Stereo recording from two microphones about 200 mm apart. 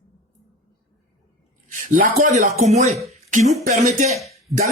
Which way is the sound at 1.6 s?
40° right (ahead or behind).